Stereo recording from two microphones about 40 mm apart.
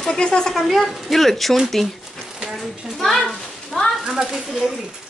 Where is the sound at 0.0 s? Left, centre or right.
Centre.